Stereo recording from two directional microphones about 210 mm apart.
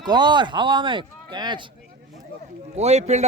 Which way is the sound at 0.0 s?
20° right (ahead or behind).